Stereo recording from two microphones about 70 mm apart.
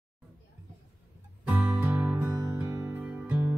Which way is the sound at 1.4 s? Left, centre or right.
Centre.